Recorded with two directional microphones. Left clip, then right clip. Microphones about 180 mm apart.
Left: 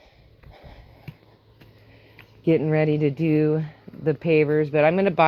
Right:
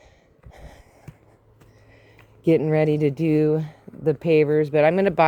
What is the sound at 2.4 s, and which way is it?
Speech, 65° right (ahead or behind).